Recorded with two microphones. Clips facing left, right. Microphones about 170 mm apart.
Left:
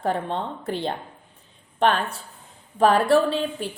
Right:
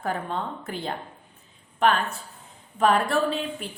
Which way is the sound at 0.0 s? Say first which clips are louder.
Left 3 dB; 30° left (ahead or behind).